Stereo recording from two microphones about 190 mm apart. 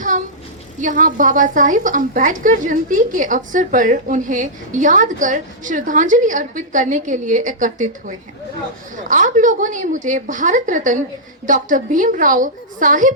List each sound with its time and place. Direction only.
0.8 s a woman's voice: 45° right (ahead or behind)